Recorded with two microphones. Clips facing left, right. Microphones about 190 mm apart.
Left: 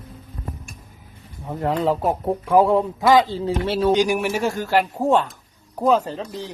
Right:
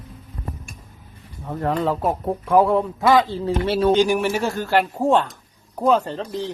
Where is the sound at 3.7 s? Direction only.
Centre (ahead or behind).